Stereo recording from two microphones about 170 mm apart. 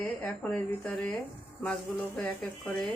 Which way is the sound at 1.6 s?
5° left (ahead or behind).